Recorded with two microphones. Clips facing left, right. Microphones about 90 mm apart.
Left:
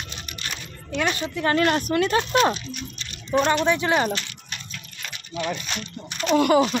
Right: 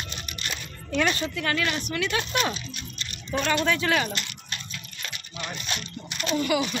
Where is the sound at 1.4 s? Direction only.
40° left (ahead or behind); by 4.0 s 20° left (ahead or behind).